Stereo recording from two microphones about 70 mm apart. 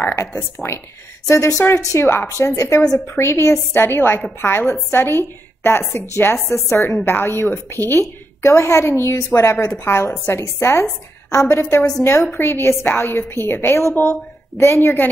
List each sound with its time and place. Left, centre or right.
0.1 s a woman's voice: left
2.4 s a woman's voice: left
7.1 s a woman's voice: left
8.0 s a woman's voice: left
12.4 s a woman's voice: left